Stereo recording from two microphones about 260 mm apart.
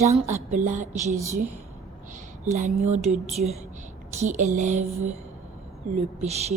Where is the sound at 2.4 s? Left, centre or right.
Right.